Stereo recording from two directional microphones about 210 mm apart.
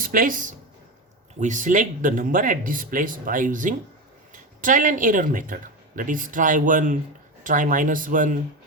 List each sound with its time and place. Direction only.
0.0 s speech: 40° right (ahead or behind)